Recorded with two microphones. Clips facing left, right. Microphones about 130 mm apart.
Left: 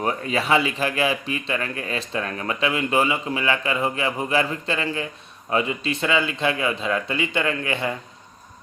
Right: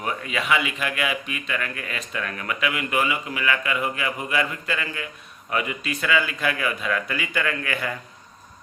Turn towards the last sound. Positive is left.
turn(degrees=25)  # may be behind; listen again after turning